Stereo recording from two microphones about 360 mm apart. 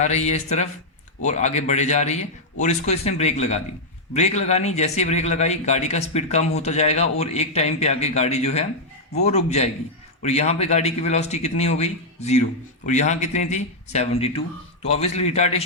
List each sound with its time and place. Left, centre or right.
0.0 s speech: centre